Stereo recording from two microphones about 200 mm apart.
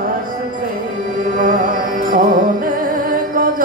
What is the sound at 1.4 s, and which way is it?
Music, 45° right (ahead or behind).